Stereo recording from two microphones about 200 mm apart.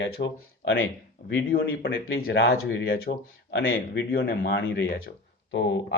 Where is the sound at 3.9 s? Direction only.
50° left (ahead or behind).